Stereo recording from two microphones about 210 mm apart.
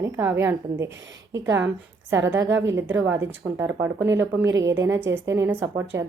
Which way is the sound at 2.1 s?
60° right (ahead or behind).